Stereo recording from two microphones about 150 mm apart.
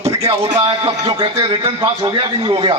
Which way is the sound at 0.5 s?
25° right (ahead or behind).